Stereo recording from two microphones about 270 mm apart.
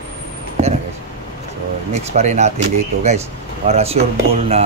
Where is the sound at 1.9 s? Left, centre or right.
Right.